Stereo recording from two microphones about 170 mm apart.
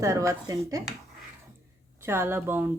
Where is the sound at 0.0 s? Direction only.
20° right (ahead or behind).